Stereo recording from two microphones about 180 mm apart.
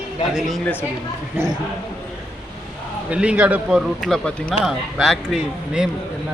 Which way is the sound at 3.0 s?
5° right (ahead or behind).